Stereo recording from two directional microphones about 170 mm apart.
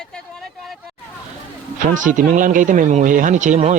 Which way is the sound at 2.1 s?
50° right (ahead or behind).